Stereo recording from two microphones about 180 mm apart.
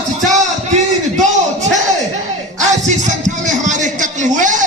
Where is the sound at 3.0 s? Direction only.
45° right (ahead or behind).